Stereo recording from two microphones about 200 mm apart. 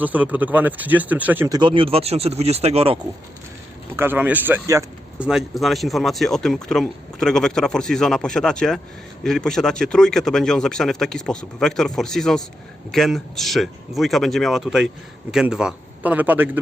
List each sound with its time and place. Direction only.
0.0 s speech: 10° right (ahead or behind); by 3.0 s 30° right (ahead or behind)
3.9 s speech: 10° right (ahead or behind)
5.3 s speech: centre (ahead or behind)